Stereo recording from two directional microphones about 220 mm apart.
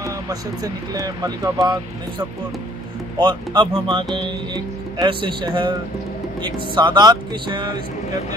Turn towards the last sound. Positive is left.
turn(degrees=-20)  # may be behind; listen again after turning